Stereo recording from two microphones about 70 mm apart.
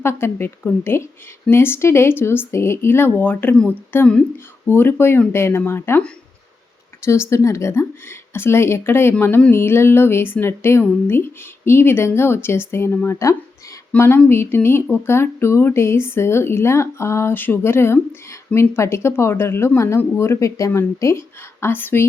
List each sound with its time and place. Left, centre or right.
0.0 s speech: left
7.0 s speech: left
13.1 s speech: left
13.9 s speech: centre
14.3 s speech: left